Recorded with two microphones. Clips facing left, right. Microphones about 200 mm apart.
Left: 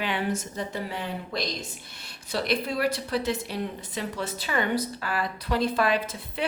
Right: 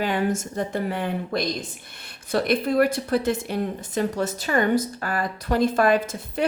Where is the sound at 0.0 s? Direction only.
45° right (ahead or behind).